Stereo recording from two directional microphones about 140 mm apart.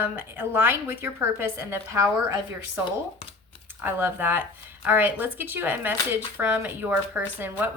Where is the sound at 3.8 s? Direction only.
15° right (ahead or behind).